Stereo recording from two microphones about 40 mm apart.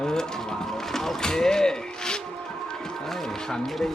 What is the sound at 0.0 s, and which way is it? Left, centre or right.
Mechanisms, centre.